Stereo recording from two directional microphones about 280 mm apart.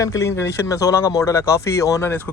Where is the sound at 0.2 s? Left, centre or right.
Centre.